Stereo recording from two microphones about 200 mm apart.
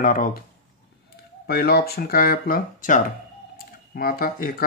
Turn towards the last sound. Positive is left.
turn(degrees=45)  # may be behind; listen again after turning